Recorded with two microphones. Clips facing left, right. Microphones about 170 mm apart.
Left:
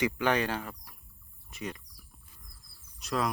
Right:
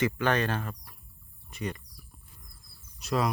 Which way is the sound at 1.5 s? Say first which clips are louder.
Right 3 dB; centre (ahead or behind).